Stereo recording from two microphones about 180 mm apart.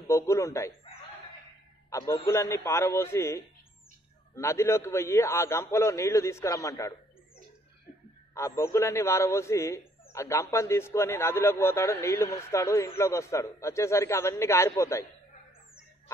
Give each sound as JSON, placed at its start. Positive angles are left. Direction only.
{"t": 0.0, "sound": "speech", "side_deg": 15}
{"t": 1.9, "sound": "a man's voice", "side_deg": 15}
{"t": 8.4, "sound": "speech", "side_deg": 15}